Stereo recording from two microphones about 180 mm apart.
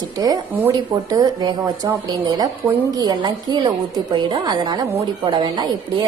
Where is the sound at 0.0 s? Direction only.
20° right (ahead or behind).